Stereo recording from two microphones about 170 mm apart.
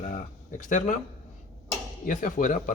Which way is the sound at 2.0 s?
50° left (ahead or behind).